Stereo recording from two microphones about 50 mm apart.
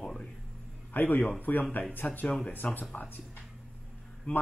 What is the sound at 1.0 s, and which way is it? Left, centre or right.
A man's voice, left.